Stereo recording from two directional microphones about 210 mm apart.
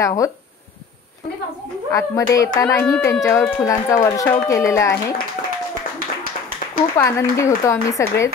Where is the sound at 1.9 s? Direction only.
15° left (ahead or behind).